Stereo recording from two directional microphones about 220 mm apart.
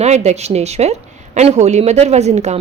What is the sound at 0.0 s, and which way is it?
Speech, 30° right (ahead or behind).